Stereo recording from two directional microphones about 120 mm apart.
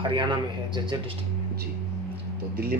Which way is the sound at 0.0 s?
40° right (ahead or behind).